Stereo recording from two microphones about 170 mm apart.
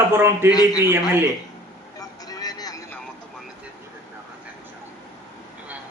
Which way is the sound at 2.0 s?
20° left (ahead or behind).